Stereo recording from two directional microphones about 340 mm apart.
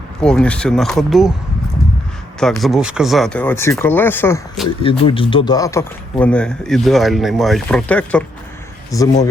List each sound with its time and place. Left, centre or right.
0.2 s a man's voice: centre
2.4 s a man's voice: centre
4.8 s a man's voice: centre